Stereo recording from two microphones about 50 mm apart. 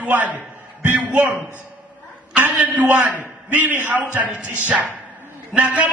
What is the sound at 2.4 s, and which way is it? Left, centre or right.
A man's voice, right.